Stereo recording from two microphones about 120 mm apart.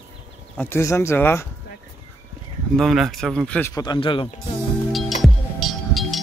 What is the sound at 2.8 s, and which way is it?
Speech, centre (ahead or behind).